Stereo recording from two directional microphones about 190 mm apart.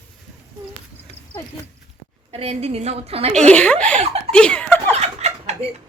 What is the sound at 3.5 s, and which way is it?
Speech, 5° left (ahead or behind).